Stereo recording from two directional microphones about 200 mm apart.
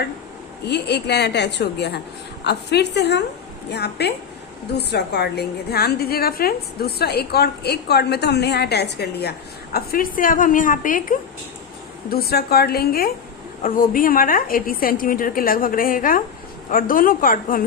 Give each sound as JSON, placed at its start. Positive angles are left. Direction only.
{"t": 0.6, "sound": "a woman's voice", "side_deg": 55}